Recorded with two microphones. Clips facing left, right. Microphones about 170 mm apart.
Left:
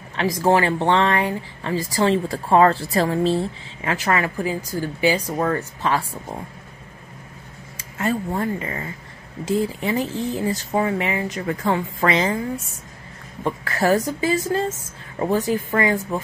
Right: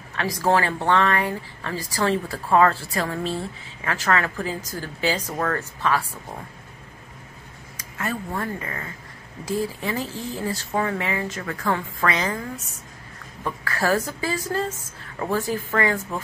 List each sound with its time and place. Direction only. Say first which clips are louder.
0.1 s speech: left 3 dB; 20° left (ahead or behind)
3.8 s speech: left 2 dB; 15° left (ahead or behind)
5.8 s speech: right 2 dB; 25° left (ahead or behind)
7.7 s speech: left 6 dB; 25° left (ahead or behind)
13.4 s speech: left 4 dB; 20° left (ahead or behind)